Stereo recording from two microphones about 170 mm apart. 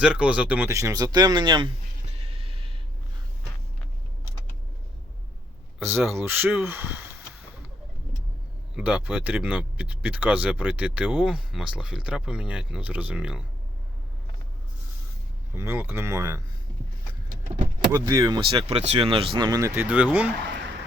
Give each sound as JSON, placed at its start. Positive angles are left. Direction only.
{"t": 0.0, "sound": "speech", "side_deg": -5}
{"t": 2.2, "sound": "a sound", "side_deg": -35}
{"t": 5.8, "sound": "speech", "side_deg": -15}
{"t": 8.7, "sound": "speech", "side_deg": -5}
{"t": 15.5, "sound": "speech", "side_deg": -15}
{"t": 17.9, "sound": "speech", "side_deg": -20}
{"t": 18.5, "sound": "speech", "side_deg": -40}